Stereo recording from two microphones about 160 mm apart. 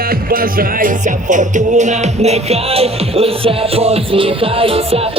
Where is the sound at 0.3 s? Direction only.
60° right (ahead or behind).